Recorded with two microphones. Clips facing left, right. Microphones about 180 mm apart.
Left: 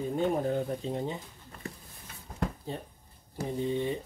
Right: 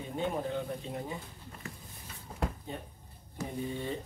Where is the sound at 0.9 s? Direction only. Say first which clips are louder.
Left 5 dB; 25° left (ahead or behind).